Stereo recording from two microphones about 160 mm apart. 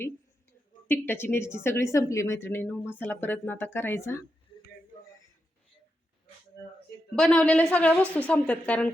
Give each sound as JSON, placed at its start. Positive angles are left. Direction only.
{"t": 0.9, "sound": "a woman's voice", "side_deg": 15}
{"t": 7.2, "sound": "a woman's voice", "side_deg": 5}